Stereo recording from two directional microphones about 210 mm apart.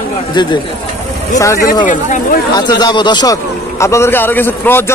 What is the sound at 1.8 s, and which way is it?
Speech, 35° left (ahead or behind).